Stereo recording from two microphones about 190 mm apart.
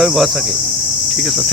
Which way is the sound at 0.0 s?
Centre (ahead or behind).